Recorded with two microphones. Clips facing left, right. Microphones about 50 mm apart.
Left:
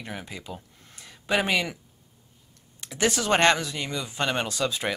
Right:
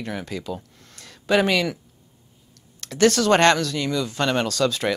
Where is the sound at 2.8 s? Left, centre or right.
Centre.